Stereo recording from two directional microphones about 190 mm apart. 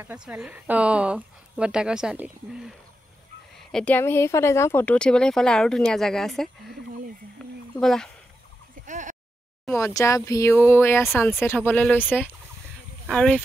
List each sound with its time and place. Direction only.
0.0 s speech: 5° right (ahead or behind)
3.5 s speech: 5° left (ahead or behind)
7.4 s a sound: 5° left (ahead or behind)
7.8 s speech: centre (ahead or behind)
8.8 s a sound: 40° right (ahead or behind)
9.8 s speech: 15° left (ahead or behind)